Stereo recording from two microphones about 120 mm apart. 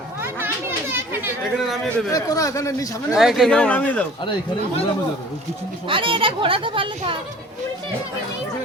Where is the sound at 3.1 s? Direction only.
Centre (ahead or behind); by 4.0 s 15° left (ahead or behind).